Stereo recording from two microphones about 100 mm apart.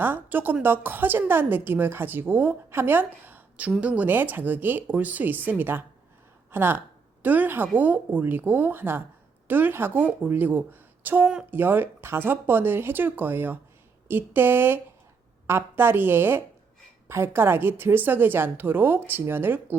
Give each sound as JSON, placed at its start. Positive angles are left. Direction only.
{"t": 0.0, "sound": "a woman's voice", "side_deg": -20}